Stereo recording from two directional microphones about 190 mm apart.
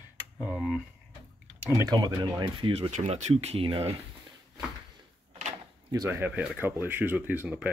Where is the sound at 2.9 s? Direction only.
35° right (ahead or behind).